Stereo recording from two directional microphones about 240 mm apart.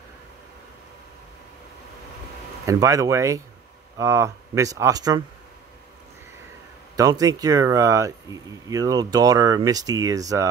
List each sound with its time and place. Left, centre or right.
2.6 s speech: centre
7.0 s speech: centre